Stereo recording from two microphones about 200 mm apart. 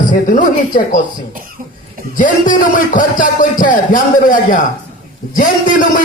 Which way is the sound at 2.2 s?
40° left (ahead or behind).